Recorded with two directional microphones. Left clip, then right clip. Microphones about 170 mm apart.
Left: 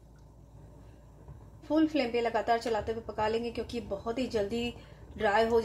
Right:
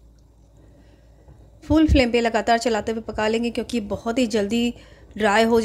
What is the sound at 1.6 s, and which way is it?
A woman's voice, 55° right (ahead or behind).